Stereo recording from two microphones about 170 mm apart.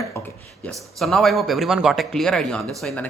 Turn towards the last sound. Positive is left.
turn(degrees=5)  # may be behind; listen again after turning